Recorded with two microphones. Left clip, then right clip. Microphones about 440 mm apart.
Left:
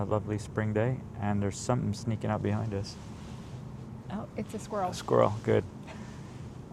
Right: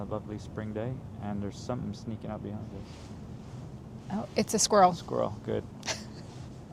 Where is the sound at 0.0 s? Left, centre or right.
Left.